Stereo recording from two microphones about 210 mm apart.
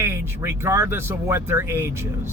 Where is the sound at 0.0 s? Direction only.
10° right (ahead or behind).